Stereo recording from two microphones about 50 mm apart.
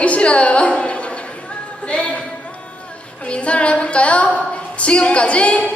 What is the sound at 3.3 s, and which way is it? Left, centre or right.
Female singing, left.